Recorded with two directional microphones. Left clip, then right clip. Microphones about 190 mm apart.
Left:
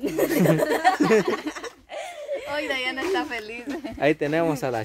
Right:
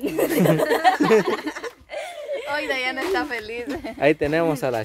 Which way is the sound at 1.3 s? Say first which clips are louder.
Right 2 dB; 10° right (ahead or behind).